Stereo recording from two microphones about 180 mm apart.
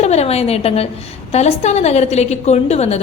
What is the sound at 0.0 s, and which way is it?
A woman's voice, 35° left (ahead or behind).